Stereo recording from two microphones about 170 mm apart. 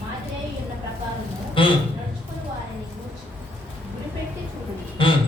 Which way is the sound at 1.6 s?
30° left (ahead or behind).